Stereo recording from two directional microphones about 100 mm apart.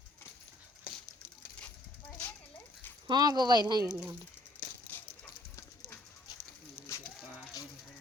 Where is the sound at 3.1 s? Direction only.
45° right (ahead or behind).